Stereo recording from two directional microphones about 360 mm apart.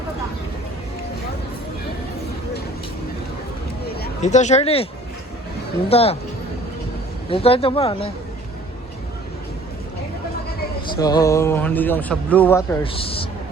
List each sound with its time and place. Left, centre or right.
3.8 s speech: left
5.9 s a man's voice: centre
7.3 s a man's voice: centre
10.9 s a man's voice: centre